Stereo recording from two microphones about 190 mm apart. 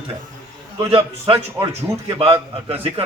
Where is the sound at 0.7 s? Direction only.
30° right (ahead or behind).